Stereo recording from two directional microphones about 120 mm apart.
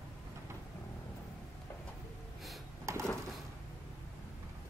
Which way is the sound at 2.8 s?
25° right (ahead or behind).